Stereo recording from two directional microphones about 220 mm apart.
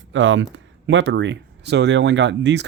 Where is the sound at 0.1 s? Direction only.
60° right (ahead or behind).